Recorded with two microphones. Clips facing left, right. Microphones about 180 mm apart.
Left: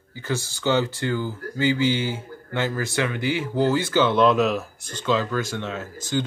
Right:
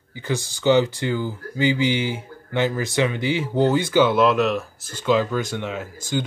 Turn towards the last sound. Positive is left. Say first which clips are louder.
# even
turn(degrees=-15)  # may be behind; listen again after turning